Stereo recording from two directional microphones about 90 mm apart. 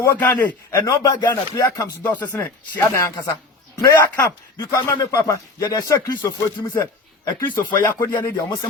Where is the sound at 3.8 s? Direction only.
50° left (ahead or behind).